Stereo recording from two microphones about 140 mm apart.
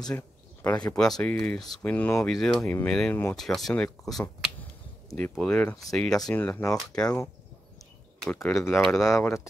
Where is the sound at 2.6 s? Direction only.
15° left (ahead or behind).